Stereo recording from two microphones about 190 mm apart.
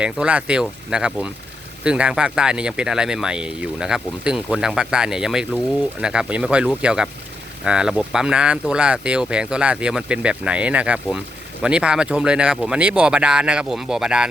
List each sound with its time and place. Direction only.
0.0 s speech: 5° right (ahead or behind)